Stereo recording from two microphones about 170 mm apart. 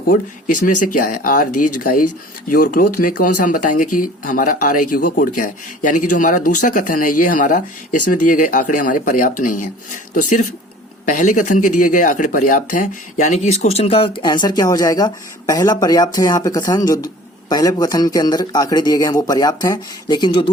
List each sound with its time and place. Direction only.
0.9 s a man's voice: 55° left (ahead or behind); by 20.5 s 30° left (ahead or behind)